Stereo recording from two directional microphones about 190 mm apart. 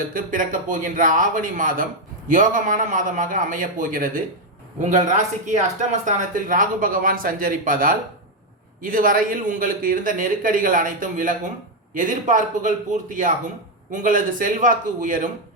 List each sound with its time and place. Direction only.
0.0 s speech: 45° right (ahead or behind)